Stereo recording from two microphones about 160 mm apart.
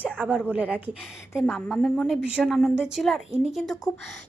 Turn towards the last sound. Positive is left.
turn(degrees=0)  # may be behind; listen again after turning